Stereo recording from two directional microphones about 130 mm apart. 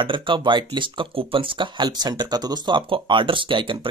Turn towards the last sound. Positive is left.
turn(degrees=-40)  # may be behind; listen again after turning